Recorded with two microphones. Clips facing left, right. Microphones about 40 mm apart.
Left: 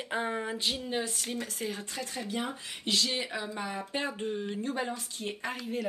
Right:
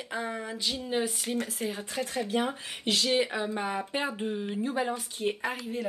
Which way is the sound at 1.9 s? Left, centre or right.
Right.